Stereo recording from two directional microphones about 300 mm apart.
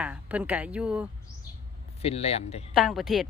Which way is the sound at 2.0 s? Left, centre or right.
Left.